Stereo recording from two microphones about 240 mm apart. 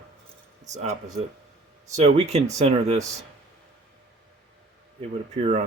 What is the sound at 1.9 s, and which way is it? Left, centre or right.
Speech, right.